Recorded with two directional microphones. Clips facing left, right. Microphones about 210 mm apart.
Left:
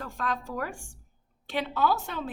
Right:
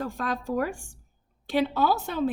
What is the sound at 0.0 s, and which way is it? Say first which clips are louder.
A woman's voice: right 3 dB; 35° right (ahead or behind).